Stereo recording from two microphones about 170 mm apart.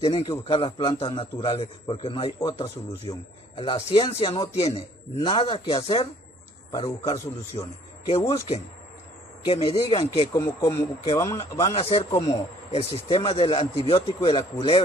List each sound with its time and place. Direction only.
0.0 s speech: 35° left (ahead or behind)
2.5 s speech: 20° left (ahead or behind)
9.5 s speech: 35° left (ahead or behind)
10.3 s speech: 20° left (ahead or behind)
11.5 s speech: 35° left (ahead or behind)
12.1 s speech: 20° left (ahead or behind)
12.7 s speech: 35° left (ahead or behind)